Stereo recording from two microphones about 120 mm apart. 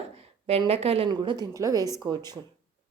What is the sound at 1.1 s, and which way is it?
Speech, 40° right (ahead or behind).